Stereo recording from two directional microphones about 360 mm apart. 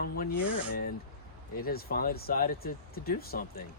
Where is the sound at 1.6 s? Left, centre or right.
Left.